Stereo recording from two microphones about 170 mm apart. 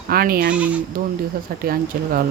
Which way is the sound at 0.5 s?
10° right (ahead or behind).